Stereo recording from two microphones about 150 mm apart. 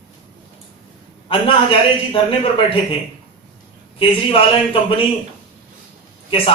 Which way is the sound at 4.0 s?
35° left (ahead or behind).